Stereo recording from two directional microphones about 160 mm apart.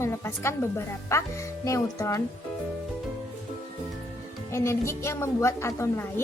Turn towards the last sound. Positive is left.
turn(degrees=15)  # may be behind; listen again after turning